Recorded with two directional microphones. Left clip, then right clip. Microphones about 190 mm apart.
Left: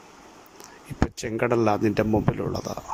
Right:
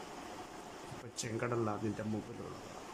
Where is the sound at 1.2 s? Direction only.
50° left (ahead or behind).